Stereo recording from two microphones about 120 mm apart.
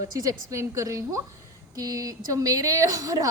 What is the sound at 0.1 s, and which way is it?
Speech, 30° right (ahead or behind).